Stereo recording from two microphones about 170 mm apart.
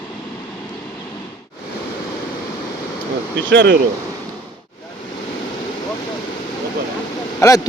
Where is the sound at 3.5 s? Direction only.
90° right.